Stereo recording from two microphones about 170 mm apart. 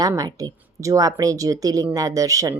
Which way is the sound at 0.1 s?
20° right (ahead or behind).